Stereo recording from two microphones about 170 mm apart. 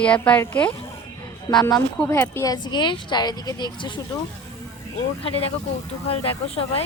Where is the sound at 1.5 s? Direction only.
25° left (ahead or behind).